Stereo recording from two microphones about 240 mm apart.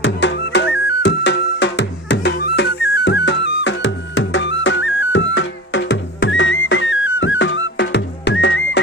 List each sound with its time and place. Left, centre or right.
0.0 s music: left